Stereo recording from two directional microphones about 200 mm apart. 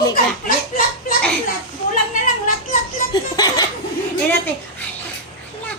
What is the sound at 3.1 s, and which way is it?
Laughter, 20° left (ahead or behind).